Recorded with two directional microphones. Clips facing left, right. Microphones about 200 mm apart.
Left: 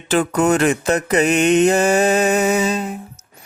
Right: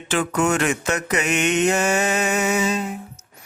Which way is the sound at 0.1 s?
35° left (ahead or behind).